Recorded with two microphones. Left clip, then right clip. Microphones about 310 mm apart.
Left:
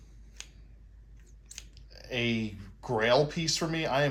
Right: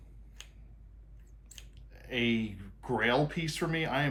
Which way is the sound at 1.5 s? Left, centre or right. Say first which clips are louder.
Left 5 dB; centre.